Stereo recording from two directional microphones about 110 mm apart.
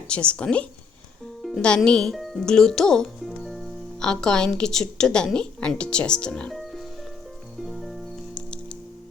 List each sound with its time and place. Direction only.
0.1 s speech: 10° left (ahead or behind)
7.6 s music: centre (ahead or behind)